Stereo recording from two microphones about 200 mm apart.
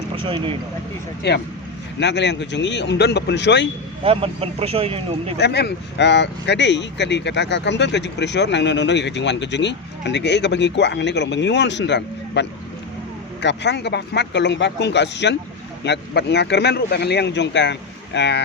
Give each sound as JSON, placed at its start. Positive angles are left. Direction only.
{"t": 0.2, "sound": "speech", "side_deg": -25}
{"t": 1.2, "sound": "speech", "side_deg": 55}
{"t": 4.0, "sound": "speech", "side_deg": -30}
{"t": 5.4, "sound": "speech", "side_deg": 55}